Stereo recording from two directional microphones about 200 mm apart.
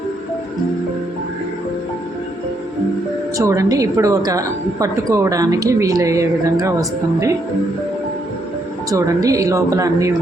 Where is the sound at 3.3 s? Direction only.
15° right (ahead or behind).